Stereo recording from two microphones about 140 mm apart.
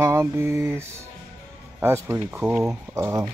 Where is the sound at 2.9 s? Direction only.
20° right (ahead or behind).